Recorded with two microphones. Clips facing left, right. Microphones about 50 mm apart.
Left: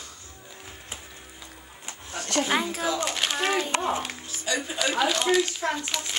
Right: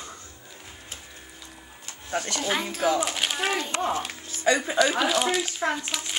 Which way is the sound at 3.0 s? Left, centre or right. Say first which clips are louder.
Even; centre.